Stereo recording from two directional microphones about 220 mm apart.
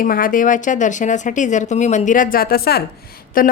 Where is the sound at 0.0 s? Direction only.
40° left (ahead or behind).